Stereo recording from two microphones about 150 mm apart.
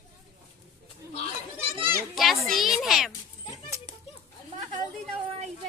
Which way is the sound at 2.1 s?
Centre (ahead or behind).